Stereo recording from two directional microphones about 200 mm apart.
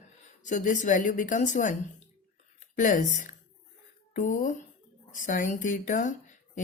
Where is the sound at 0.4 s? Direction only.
40° left (ahead or behind).